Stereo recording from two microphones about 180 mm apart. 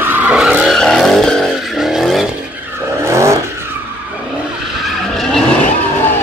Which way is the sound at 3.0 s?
15° right (ahead or behind).